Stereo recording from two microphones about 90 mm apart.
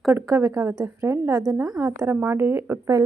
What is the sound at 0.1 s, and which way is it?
A woman's voice, 35° right (ahead or behind).